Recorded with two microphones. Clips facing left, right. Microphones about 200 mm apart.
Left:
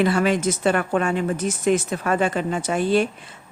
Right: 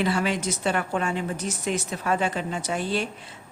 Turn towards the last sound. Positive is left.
turn(degrees=50)  # may be behind; listen again after turning